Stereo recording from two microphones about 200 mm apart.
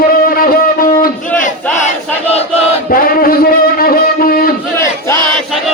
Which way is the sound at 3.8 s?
45° left (ahead or behind).